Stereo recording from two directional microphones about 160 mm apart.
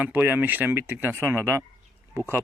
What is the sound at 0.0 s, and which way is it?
Speech, 10° right (ahead or behind).